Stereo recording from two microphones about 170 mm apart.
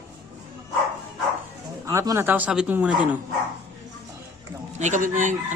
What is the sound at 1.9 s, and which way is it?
Speech, 15° right (ahead or behind).